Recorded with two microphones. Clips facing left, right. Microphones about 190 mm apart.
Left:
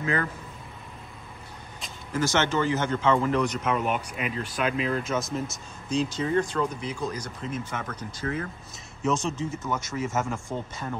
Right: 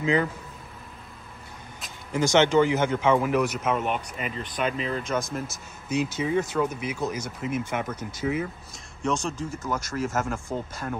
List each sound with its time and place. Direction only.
0.0 s speech: 15° right (ahead or behind)
2.1 s speech: 15° right (ahead or behind)
9.0 s speech: 5° left (ahead or behind)